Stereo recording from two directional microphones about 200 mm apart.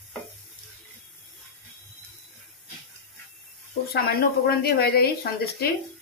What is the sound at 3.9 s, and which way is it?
A woman's voice, 50° left (ahead or behind).